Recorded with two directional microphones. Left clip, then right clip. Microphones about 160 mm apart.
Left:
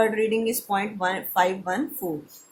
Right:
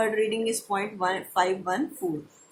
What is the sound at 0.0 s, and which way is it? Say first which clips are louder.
Speech: left 3 dB; 35° left (ahead or behind).